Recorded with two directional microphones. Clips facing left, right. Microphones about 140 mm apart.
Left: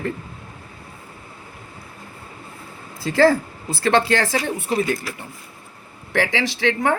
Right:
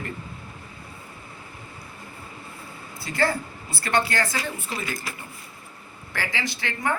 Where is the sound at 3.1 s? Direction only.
90° left; by 4.9 s 65° left (ahead or behind).